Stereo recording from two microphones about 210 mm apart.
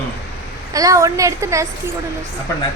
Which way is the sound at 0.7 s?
15° right (ahead or behind).